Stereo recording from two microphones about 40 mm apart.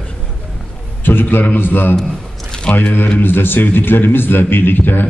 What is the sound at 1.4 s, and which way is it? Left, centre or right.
Speech, left.